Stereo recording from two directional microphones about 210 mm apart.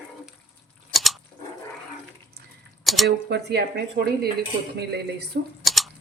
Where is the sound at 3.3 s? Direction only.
50° right (ahead or behind).